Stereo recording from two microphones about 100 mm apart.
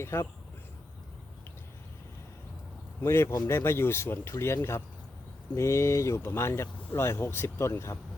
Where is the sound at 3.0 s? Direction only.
25° left (ahead or behind).